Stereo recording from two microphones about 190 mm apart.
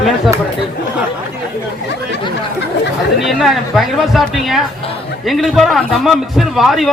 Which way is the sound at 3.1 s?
Centre (ahead or behind).